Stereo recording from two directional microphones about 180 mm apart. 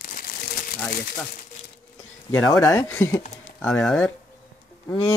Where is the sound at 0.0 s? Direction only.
50° left (ahead or behind).